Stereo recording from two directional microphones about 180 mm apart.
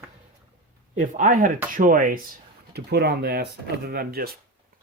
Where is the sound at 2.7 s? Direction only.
60° right (ahead or behind).